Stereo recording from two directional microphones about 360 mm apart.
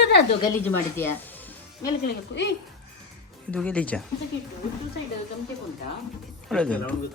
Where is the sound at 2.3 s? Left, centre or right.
Left.